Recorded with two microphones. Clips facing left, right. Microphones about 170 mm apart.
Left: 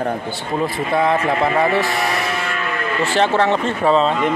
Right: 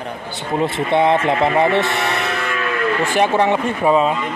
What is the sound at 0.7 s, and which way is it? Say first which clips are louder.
Speech: right 3 dB; 25° right (ahead or behind).